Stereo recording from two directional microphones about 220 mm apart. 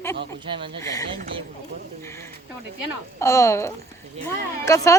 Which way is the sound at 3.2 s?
15° left (ahead or behind).